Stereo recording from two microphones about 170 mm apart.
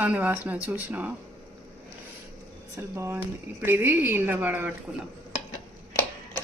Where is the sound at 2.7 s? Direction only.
15° right (ahead or behind).